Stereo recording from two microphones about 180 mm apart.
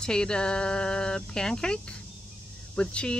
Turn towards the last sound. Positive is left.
turn(degrees=5)  # may be behind; listen again after turning